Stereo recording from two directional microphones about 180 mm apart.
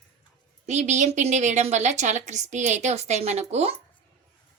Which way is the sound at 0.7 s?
40° right (ahead or behind).